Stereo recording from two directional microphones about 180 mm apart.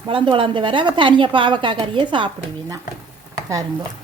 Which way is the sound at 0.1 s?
30° right (ahead or behind).